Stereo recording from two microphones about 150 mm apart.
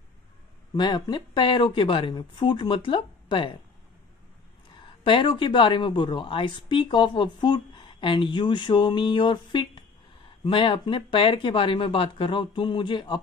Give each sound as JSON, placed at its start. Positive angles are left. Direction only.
{"t": 0.7, "sound": "speech", "side_deg": 30}
{"t": 4.7, "sound": "speech", "side_deg": 35}